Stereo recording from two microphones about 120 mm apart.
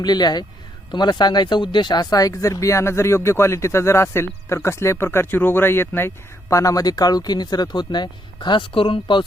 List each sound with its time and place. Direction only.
0.0 s speech: 35° left (ahead or behind)